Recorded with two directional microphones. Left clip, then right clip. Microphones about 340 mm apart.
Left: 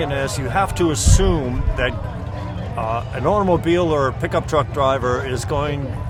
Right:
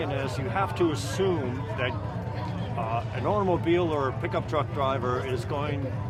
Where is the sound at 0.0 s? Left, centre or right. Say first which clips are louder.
Left 8 dB; left.